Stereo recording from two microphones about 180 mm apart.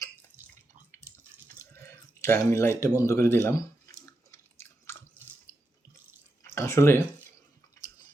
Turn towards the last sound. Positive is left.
turn(degrees=15)  # may be behind; listen again after turning